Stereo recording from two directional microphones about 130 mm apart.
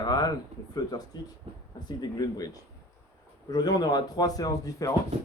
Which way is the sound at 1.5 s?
50° right (ahead or behind).